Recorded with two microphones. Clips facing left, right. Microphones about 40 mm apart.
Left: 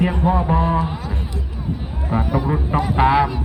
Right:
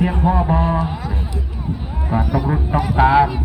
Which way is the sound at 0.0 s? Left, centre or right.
Centre.